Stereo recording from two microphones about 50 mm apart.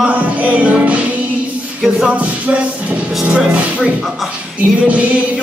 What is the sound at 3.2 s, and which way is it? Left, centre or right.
Speech, centre.